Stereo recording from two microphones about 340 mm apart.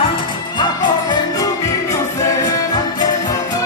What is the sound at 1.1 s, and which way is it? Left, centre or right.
Music, centre.